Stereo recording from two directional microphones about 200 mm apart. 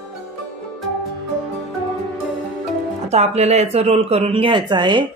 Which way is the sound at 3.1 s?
35° right (ahead or behind).